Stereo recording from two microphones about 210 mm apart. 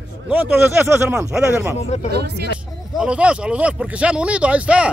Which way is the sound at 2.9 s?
5° right (ahead or behind).